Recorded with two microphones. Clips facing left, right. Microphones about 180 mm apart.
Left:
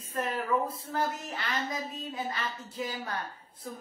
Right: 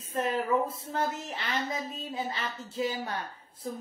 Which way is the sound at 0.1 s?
25° right (ahead or behind).